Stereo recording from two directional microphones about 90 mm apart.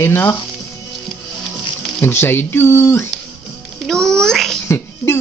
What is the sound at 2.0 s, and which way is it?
Speech, 25° left (ahead or behind).